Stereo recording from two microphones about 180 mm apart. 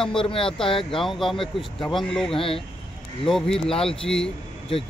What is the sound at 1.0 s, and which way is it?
Speech, centre (ahead or behind).